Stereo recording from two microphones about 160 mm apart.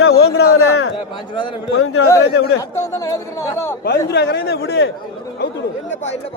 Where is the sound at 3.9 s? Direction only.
90° left.